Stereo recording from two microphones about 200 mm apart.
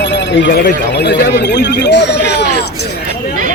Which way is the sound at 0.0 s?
65° left (ahead or behind).